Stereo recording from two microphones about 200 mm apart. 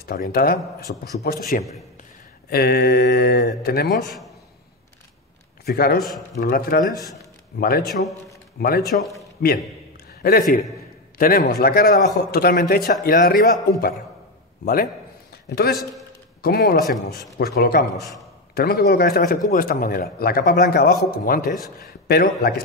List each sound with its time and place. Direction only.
0.0 s a man's voice: 50° left (ahead or behind)
5.7 s a man's voice: 50° left (ahead or behind)
16.4 s a man's voice: 50° left (ahead or behind)